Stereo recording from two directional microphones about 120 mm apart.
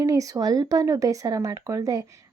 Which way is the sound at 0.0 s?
30° right (ahead or behind).